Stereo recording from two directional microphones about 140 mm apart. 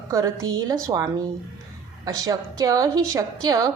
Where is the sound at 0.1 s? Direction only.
25° right (ahead or behind).